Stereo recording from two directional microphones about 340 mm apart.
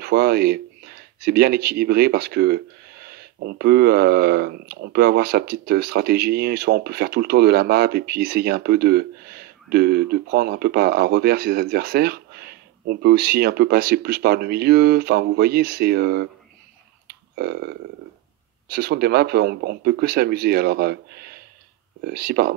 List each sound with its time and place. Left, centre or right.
0.0 s speech: right
17.1 s a sound: right
18.7 s speech: right